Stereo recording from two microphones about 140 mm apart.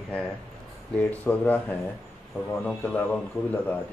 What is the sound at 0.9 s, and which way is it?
Speech, 10° left (ahead or behind).